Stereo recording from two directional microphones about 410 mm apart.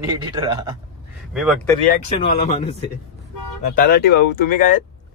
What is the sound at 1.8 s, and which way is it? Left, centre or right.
A man's voice, centre.